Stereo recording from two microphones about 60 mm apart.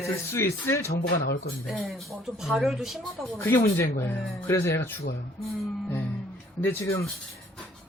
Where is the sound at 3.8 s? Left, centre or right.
Left.